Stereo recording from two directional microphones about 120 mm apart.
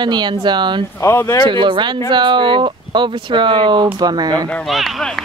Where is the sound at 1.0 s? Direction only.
25° left (ahead or behind).